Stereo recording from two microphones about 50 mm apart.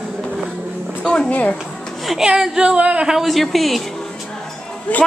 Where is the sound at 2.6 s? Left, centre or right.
Right.